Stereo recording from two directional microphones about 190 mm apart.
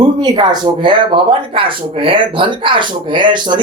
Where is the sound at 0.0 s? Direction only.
20° right (ahead or behind).